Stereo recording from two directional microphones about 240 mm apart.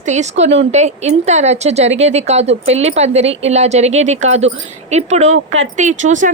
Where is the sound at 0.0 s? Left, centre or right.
Right.